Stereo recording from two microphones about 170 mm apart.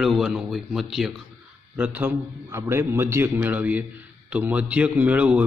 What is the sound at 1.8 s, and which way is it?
Speech, 10° right (ahead or behind).